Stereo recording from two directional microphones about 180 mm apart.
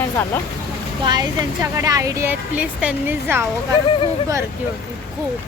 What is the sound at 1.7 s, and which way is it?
Speech, 20° right (ahead or behind).